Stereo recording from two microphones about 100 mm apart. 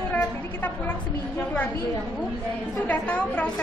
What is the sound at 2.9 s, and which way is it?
Speech, 15° left (ahead or behind).